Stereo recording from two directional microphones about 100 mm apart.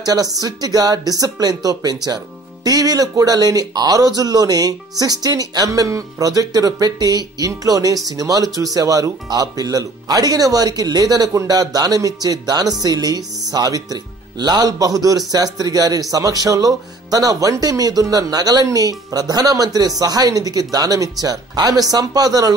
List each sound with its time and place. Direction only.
0.0 s speech: 40° right (ahead or behind)